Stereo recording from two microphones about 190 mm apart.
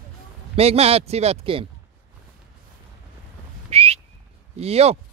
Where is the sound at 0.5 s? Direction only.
30° right (ahead or behind).